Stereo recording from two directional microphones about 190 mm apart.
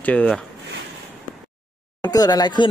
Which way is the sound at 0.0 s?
5° left (ahead or behind).